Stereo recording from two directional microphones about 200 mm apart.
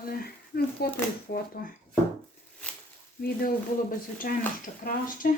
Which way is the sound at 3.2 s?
50° left (ahead or behind).